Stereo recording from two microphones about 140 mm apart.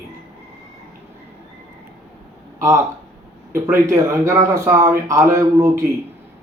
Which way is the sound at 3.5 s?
20° right (ahead or behind).